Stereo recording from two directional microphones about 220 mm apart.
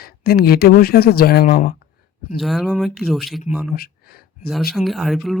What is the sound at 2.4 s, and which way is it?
Speech, centre (ahead or behind).